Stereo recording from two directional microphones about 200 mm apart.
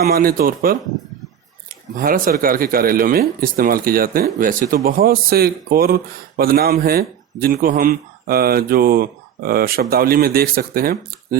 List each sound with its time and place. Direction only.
0.0 s speech: 50° right (ahead or behind)
2.0 s speech: 45° right (ahead or behind)